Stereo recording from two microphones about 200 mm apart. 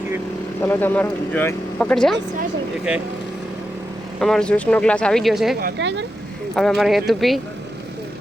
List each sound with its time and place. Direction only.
0.6 s speech: 10° left (ahead or behind)
2.9 s speech: 5° right (ahead or behind)
4.2 s speech: centre (ahead or behind)
5.5 s speech: 55° right (ahead or behind)
6.6 s speech: centre (ahead or behind)